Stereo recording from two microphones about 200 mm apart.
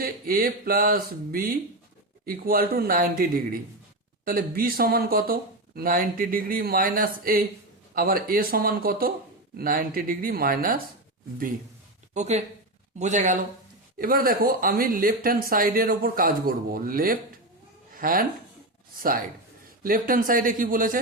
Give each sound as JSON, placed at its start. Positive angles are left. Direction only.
{"t": 0.0, "sound": "speech", "side_deg": -45}
{"t": 12.1, "sound": "a man's voice", "side_deg": -35}